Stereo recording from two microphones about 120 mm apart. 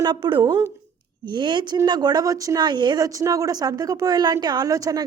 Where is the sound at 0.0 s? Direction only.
40° right (ahead or behind).